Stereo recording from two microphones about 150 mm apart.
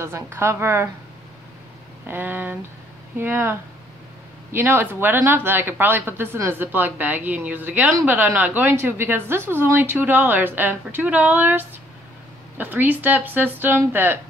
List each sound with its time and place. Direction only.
0.0 s speech: 15° right (ahead or behind)
2.0 s speech: 10° right (ahead or behind)